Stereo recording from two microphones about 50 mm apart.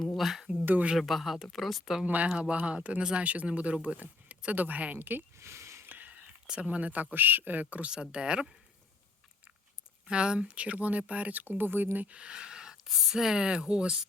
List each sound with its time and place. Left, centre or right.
0.2 s a woman's voice: centre
0.6 s speech: right
0.9 s a woman's voice: centre
2.0 s speech: right
2.3 s speech: centre; by 5.2 s right
5.4 s a sound: right
5.8 s a sound: right
6.1 s speech: right
8.1 s speech: centre
10.1 s speech: centre; by 11.9 s right
11.9 s speech: right